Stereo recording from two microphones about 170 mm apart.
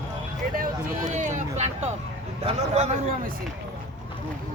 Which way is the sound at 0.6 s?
45° right (ahead or behind).